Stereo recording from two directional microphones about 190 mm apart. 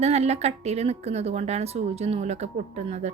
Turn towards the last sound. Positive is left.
turn(degrees=-35)  # may be behind; listen again after turning